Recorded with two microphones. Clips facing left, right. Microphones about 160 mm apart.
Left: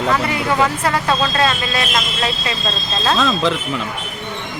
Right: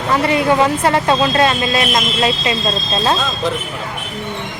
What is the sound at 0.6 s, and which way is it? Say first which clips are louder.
Speech: right 3 dB; 25° right (ahead or behind).